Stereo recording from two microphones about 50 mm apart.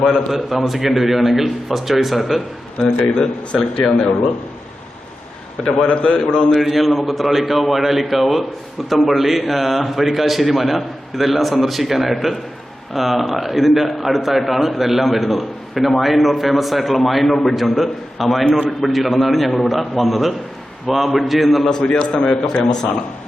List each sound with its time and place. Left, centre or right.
0.0 s a man's voice: centre
0.3 s a man's voice: centre
2.8 s speech: left
5.6 s speech: centre
6.6 s a man's voice: centre
18.4 s speech: left
18.8 s a man's voice: centre
21.8 s speech: centre